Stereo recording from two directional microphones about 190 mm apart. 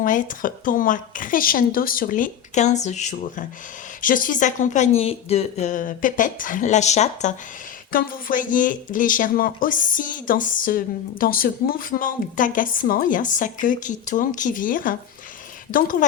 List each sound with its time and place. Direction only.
0.0 s a woman's voice: 45° left (ahead or behind)